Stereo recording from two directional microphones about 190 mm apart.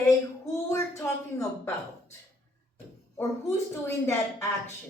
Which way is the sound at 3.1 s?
15° left (ahead or behind).